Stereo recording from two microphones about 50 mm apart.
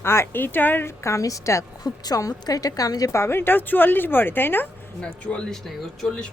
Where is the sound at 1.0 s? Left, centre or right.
Left.